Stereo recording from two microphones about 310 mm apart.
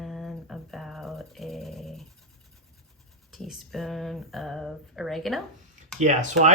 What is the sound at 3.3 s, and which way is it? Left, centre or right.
Speech, centre.